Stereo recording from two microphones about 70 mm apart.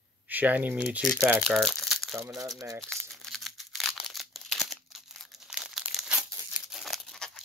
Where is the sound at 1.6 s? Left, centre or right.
Centre.